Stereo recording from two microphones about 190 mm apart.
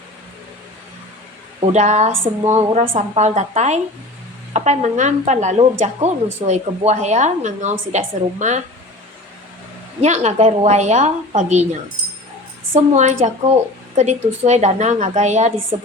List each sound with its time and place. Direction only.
1.6 s a woman's voice: 35° right (ahead or behind)
10.0 s a woman's voice: 35° right (ahead or behind)